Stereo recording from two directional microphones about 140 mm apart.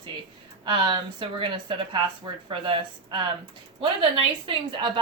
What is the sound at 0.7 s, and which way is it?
Speech, 35° right (ahead or behind).